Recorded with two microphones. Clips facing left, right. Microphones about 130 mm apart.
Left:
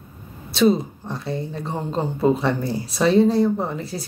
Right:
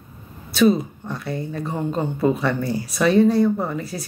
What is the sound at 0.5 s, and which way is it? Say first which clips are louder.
Speech: right 1 dB; 25° left (ahead or behind).